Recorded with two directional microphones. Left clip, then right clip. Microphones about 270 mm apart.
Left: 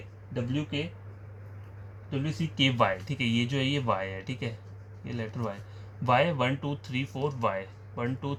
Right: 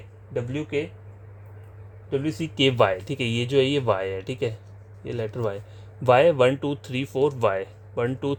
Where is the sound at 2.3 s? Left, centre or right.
Right.